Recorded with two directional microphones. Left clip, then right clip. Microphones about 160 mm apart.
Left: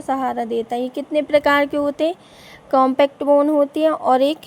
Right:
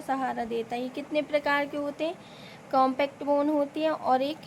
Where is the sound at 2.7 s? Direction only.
45° left (ahead or behind).